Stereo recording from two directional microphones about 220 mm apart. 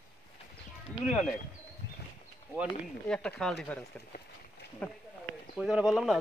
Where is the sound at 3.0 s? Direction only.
5° left (ahead or behind).